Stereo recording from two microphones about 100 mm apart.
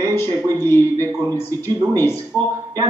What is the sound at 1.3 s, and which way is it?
Speech, 25° left (ahead or behind).